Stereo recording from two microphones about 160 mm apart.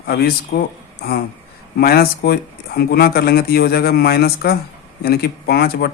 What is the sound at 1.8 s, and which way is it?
Speech, 75° left (ahead or behind).